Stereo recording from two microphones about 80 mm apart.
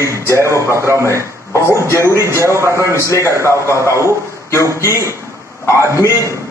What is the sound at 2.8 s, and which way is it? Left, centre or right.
Speech, left.